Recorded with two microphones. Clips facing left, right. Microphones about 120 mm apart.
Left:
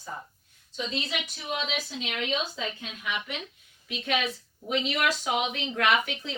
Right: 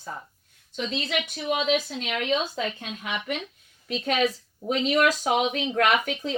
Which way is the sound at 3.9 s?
40° right (ahead or behind).